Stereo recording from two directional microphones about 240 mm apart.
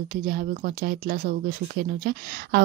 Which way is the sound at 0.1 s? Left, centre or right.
Right.